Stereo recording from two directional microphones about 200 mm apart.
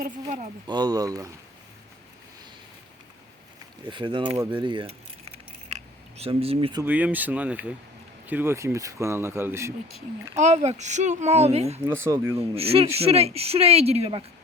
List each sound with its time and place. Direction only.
0.0 s speech: 35° right (ahead or behind)
0.7 s speech: 20° right (ahead or behind)
3.8 s speech: 25° right (ahead or behind)
5.7 s a sound: 30° right (ahead or behind)
6.8 s speech: 10° right (ahead or behind)
10.3 s speech: 35° right (ahead or behind)
12.0 s speech: 15° right (ahead or behind)
12.4 s speech: 30° right (ahead or behind)